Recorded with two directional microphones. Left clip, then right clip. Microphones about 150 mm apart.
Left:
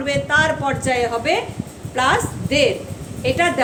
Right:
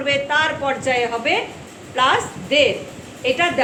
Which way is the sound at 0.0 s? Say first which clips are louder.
Left 1 dB; 50° left (ahead or behind).